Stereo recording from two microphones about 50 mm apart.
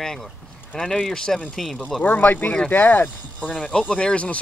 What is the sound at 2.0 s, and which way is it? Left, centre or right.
Speech, left.